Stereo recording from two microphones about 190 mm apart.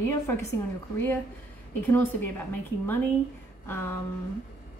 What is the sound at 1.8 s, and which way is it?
A woman's voice, 10° left (ahead or behind).